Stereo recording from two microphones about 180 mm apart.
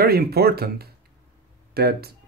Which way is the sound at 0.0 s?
60° right (ahead or behind).